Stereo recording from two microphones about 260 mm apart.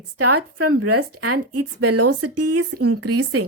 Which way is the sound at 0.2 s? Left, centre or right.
Right.